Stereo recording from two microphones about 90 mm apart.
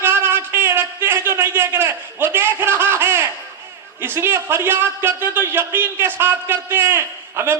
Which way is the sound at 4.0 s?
25° right (ahead or behind).